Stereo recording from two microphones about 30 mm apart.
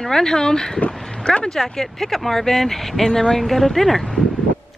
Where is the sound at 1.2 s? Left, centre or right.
Left.